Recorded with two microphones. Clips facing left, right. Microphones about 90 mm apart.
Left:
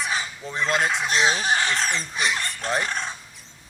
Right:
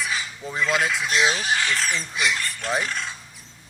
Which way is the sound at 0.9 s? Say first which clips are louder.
Even; 40° left (ahead or behind).